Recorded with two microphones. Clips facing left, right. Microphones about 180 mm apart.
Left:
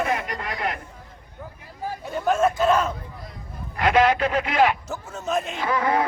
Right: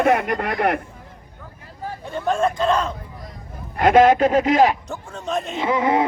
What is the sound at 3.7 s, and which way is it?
A man's voice, 45° right (ahead or behind).